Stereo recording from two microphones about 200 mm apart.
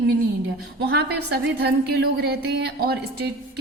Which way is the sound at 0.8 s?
55° right (ahead or behind).